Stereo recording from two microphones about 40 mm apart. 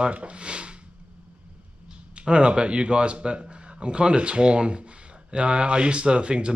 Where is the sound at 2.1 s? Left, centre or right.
Right.